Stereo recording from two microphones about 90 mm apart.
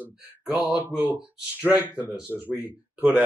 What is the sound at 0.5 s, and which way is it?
Speech, 15° right (ahead or behind).